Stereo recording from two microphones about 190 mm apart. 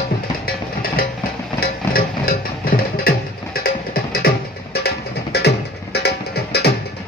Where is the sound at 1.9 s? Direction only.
50° left (ahead or behind).